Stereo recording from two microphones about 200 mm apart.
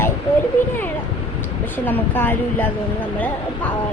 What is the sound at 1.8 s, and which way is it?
A woman's voice, 10° left (ahead or behind).